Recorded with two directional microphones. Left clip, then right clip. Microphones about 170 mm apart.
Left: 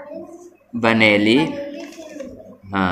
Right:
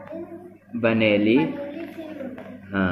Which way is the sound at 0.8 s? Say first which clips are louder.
Left 5 dB; 35° left (ahead or behind).